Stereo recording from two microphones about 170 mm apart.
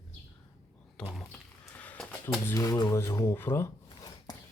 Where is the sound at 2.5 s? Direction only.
20° left (ahead or behind).